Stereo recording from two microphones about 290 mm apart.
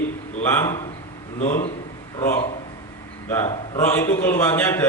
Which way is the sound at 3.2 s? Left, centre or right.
Centre.